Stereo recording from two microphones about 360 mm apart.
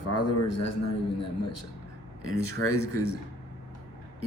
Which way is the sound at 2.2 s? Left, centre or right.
Left.